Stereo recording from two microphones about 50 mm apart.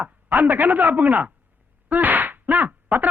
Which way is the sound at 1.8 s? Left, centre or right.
Right.